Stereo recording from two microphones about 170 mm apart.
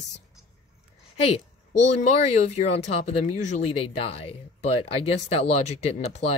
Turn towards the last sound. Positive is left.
turn(degrees=40)  # may be behind; listen again after turning